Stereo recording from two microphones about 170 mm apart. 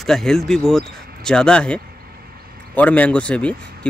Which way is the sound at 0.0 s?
Centre (ahead or behind).